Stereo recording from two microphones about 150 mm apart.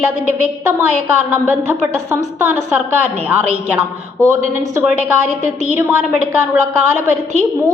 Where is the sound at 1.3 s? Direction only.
10° right (ahead or behind).